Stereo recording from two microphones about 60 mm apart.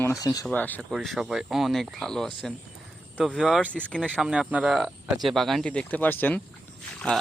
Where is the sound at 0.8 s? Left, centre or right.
Centre.